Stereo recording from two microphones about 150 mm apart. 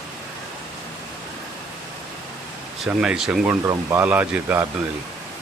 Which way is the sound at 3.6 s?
15° right (ahead or behind).